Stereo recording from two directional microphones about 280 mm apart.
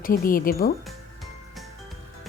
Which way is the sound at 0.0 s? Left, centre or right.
Left.